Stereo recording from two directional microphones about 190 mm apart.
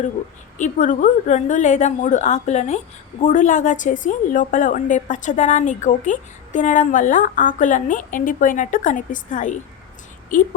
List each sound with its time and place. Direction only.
0.6 s a woman's voice: 45° left (ahead or behind)